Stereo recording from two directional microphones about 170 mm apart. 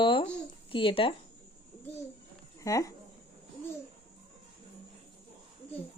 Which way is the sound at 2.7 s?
20° left (ahead or behind).